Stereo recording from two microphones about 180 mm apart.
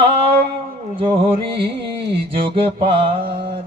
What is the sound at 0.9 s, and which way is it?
Music, 30° right (ahead or behind).